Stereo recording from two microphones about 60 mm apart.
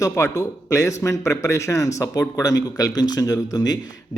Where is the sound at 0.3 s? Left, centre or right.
Left.